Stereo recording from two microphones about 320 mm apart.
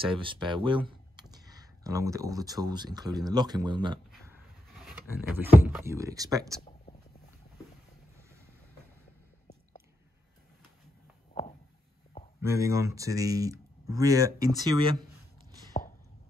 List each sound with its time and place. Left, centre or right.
0.0 s speech: centre
12.4 s speech: centre
15.7 s a sound: left